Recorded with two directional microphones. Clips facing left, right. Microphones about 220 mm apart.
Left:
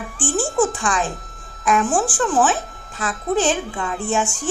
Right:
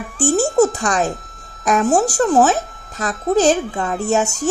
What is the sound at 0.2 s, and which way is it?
A child's voice, 40° right (ahead or behind).